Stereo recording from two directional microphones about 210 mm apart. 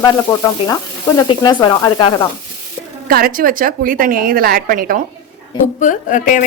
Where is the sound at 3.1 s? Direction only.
40° right (ahead or behind).